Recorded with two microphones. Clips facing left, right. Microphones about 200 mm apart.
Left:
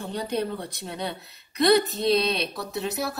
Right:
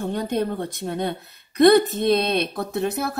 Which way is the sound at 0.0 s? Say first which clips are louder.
Right 4 dB; 50° right (ahead or behind).